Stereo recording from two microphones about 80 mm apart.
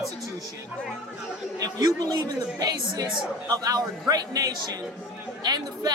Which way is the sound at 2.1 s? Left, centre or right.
Right.